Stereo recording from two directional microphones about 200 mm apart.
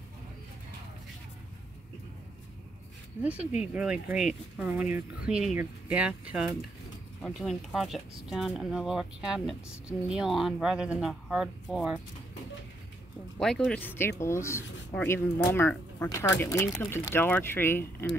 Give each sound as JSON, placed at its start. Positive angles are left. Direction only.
{"t": 3.2, "sound": "speech", "side_deg": -5}
{"t": 13.4, "sound": "speech", "side_deg": 5}